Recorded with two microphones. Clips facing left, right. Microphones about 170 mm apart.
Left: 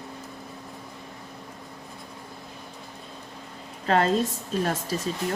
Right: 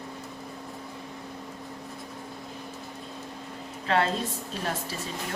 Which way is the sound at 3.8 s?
40° left (ahead or behind).